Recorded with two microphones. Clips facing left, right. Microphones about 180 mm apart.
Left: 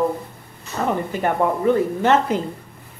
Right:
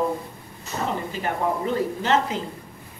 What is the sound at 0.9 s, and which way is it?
Speech, 55° left (ahead or behind).